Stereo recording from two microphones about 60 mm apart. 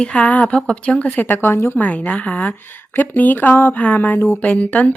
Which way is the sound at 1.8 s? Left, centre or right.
Left.